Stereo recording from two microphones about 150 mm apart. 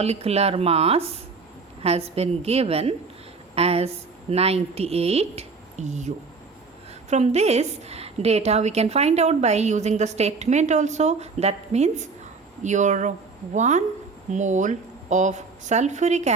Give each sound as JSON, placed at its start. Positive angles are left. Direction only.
{"t": 0.0, "sound": "a woman's voice", "side_deg": -45}